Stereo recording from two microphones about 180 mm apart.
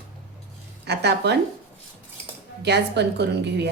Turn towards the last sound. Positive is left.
turn(degrees=-70)  # may be behind; listen again after turning